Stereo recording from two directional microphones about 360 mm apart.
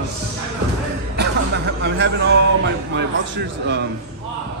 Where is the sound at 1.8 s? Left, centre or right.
Right.